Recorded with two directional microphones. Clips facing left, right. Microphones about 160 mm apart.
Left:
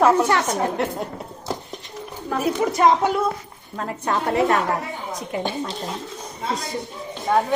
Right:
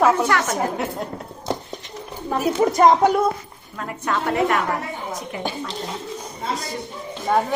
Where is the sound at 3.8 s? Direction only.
30° left (ahead or behind).